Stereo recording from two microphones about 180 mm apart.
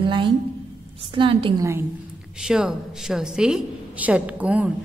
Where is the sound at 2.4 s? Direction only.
5° right (ahead or behind).